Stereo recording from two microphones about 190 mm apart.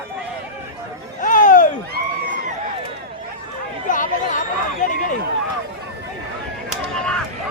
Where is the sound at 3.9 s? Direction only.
45° left (ahead or behind).